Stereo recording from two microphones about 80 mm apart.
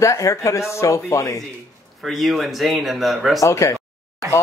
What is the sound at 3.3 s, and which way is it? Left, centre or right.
Speech, left.